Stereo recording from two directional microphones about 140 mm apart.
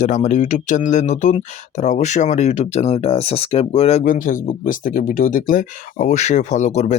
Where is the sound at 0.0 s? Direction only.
55° left (ahead or behind).